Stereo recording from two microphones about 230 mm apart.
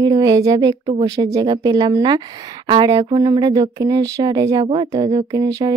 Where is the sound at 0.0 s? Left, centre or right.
Centre.